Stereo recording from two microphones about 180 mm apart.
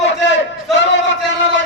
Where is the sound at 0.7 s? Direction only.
80° left.